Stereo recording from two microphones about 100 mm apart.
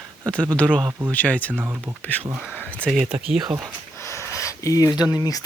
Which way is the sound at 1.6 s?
25° right (ahead or behind).